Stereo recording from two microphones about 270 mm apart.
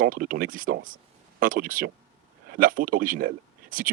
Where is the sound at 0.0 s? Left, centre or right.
Right.